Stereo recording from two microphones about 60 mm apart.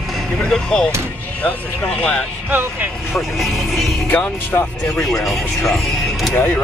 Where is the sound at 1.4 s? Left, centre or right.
Left.